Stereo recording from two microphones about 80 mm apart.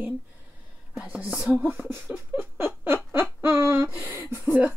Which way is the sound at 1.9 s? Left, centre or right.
Right.